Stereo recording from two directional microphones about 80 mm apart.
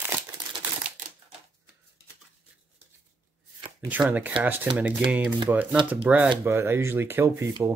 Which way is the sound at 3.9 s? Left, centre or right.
Centre.